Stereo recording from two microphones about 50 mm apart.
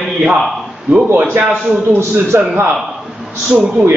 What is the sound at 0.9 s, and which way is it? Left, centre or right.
Speech, right.